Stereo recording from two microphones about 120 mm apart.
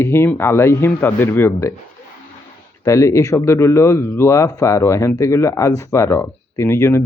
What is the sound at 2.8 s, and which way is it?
Speech, 25° left (ahead or behind).